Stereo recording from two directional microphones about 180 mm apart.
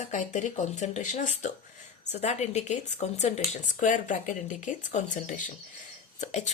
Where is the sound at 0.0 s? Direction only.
40° left (ahead or behind).